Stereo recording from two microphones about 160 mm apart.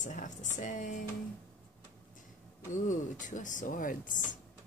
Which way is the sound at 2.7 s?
55° left (ahead or behind).